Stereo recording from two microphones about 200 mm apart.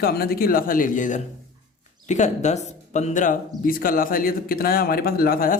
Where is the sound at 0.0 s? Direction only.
50° left (ahead or behind).